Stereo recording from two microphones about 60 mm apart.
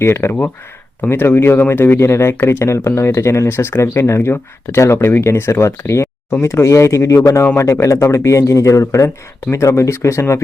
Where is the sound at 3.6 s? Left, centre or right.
Left.